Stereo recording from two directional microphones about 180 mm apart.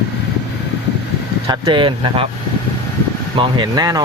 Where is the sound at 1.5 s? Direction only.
25° right (ahead or behind).